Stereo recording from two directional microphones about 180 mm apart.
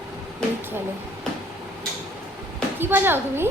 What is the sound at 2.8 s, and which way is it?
Speech, 10° right (ahead or behind).